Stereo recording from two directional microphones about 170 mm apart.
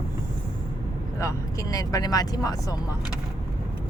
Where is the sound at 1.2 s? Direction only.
20° left (ahead or behind).